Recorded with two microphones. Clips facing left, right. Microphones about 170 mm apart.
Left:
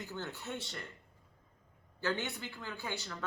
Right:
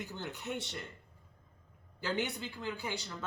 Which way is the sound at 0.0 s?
15° right (ahead or behind).